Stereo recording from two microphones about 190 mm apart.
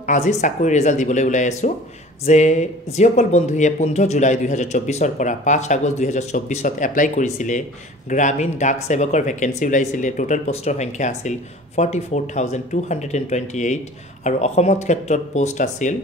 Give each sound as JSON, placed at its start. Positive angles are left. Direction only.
{"t": 0.0, "sound": "speech", "side_deg": 40}